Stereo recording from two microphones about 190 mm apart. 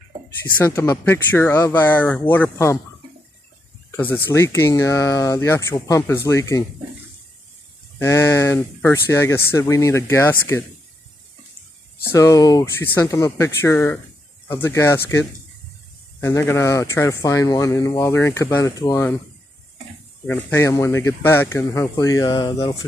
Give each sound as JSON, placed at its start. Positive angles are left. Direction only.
{"t": 0.4, "sound": "speech", "side_deg": 10}
{"t": 3.9, "sound": "speech", "side_deg": 10}
{"t": 8.0, "sound": "speech", "side_deg": 15}
{"t": 12.1, "sound": "speech", "side_deg": 15}
{"t": 20.2, "sound": "speech", "side_deg": 15}